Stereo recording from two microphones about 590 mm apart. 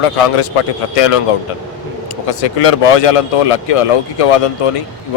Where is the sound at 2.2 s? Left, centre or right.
Left.